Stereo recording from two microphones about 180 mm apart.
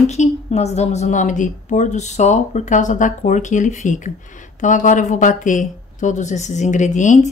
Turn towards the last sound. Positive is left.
turn(degrees=40)  # may be behind; listen again after turning